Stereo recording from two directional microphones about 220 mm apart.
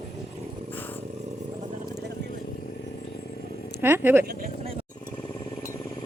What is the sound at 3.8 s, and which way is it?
Speech, 10° right (ahead or behind).